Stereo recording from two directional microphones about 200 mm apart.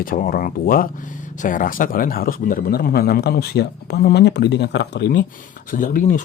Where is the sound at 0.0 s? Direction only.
45° left (ahead or behind).